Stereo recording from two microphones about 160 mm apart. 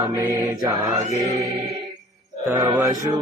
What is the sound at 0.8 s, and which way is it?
Music, 20° right (ahead or behind).